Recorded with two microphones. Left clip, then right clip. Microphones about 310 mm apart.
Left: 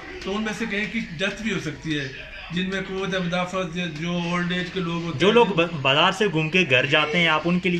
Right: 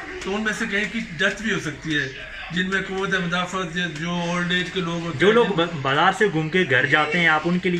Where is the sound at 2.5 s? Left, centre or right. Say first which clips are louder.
Right 4 dB; centre.